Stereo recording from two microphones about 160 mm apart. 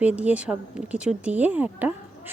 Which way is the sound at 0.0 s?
10° right (ahead or behind).